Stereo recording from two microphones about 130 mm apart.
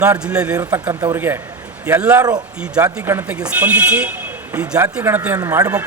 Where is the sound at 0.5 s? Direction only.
30° right (ahead or behind); by 2.2 s 10° right (ahead or behind).